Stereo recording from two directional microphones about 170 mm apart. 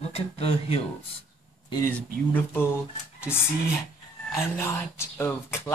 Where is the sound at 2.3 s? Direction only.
10° left (ahead or behind).